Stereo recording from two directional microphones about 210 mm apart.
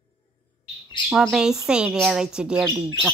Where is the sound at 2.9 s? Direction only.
15° right (ahead or behind).